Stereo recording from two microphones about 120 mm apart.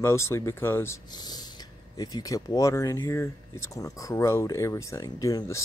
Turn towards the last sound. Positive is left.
turn(degrees=25)  # may be behind; listen again after turning